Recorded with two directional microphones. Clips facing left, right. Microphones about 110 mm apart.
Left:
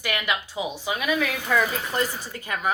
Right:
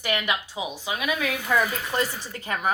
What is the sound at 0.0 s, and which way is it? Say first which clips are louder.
Speech: right 1 dB; 25° right (ahead or behind).